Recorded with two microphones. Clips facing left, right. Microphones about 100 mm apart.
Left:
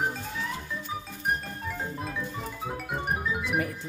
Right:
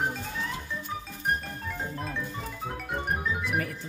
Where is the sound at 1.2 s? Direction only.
5° left (ahead or behind).